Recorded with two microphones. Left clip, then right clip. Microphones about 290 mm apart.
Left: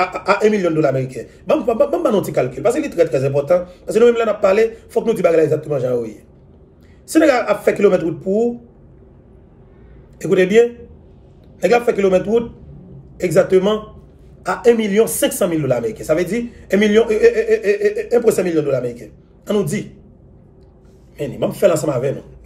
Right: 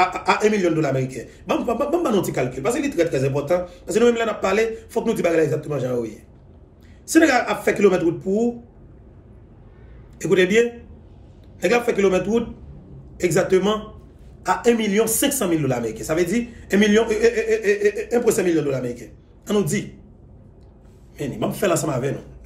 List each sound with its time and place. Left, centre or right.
0.0 s a man's voice: centre
10.1 s a man's voice: centre
21.2 s a man's voice: centre